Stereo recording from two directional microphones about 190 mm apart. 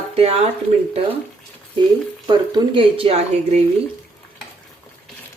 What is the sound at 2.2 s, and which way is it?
Speech, 20° right (ahead or behind).